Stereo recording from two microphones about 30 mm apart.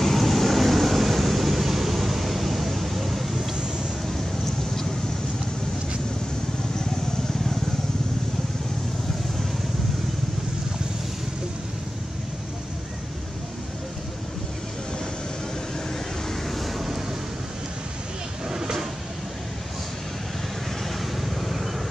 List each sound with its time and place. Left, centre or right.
0.0 s vehicle: centre
16.3 s vehicle: centre
18.5 s vehicle: centre
21.4 s vehicle: centre